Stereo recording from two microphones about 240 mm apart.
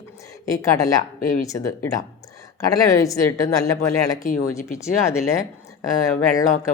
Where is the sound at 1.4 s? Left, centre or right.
Centre.